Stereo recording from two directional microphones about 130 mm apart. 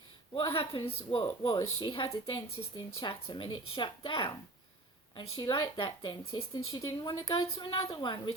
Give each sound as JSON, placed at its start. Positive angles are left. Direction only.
{"t": 0.3, "sound": "a woman's voice", "side_deg": 45}
{"t": 1.3, "sound": "speech", "side_deg": 30}